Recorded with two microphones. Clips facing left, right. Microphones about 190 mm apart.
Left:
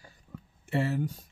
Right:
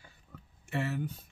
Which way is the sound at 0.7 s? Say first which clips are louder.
Left 5 dB; 30° left (ahead or behind).